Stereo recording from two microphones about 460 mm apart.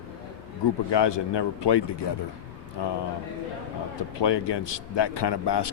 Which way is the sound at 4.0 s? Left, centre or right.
Left.